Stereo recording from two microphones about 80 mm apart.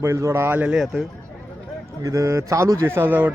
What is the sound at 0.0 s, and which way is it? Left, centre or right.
Speech, right.